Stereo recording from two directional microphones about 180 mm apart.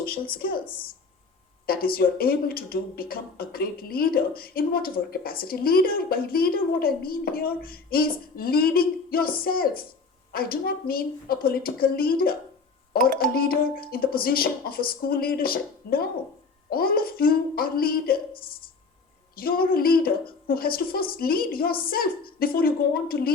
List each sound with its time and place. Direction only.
0.1 s speech: 55° left (ahead or behind)
1.6 s speech: 55° left (ahead or behind)
19.4 s speech: 55° left (ahead or behind)